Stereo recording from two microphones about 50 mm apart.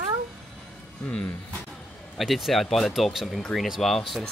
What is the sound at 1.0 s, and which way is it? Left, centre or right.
Speech, left.